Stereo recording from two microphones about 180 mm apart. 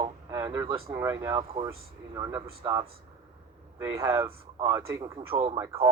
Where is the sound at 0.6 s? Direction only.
30° right (ahead or behind).